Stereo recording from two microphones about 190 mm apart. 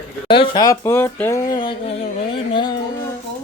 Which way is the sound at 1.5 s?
30° left (ahead or behind).